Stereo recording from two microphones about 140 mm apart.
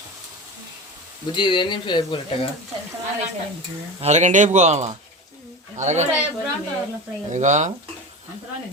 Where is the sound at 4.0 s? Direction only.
55° right (ahead or behind).